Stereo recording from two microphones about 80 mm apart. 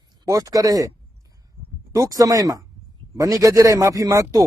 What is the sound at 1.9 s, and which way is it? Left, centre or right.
Speech, right.